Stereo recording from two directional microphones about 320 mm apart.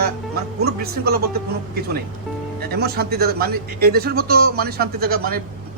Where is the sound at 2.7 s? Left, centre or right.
Right.